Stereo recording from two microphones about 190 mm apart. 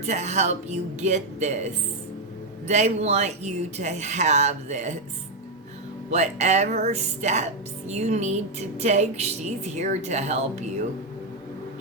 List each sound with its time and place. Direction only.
0.0 s speech: 35° right (ahead or behind)
6.1 s speech: 35° right (ahead or behind)